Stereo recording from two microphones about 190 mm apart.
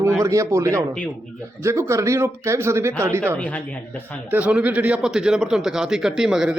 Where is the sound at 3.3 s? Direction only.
5° left (ahead or behind).